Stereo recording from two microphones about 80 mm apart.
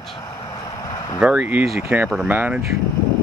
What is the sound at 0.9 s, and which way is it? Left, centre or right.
Vehicle, left.